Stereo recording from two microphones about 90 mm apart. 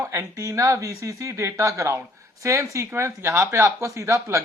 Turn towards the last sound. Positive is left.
turn(degrees=-30)  # may be behind; listen again after turning